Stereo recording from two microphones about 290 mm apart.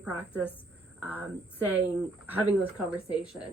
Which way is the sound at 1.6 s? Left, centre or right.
Centre.